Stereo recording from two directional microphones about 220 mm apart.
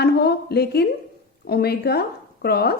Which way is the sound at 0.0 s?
45° left (ahead or behind).